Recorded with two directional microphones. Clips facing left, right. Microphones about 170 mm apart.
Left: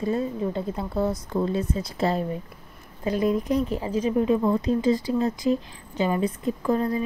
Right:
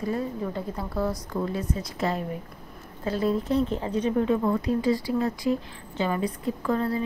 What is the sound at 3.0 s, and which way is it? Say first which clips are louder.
Speech: left 2 dB; 15° left (ahead or behind).